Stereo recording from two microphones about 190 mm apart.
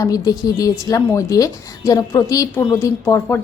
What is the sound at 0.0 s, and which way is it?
A woman's voice, 20° left (ahead or behind).